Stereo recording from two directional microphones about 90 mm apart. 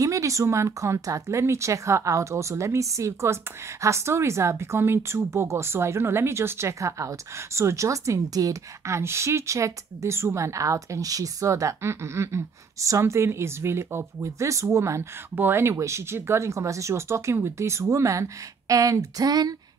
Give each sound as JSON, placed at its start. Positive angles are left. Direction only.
{"t": 0.0, "sound": "speech", "side_deg": -35}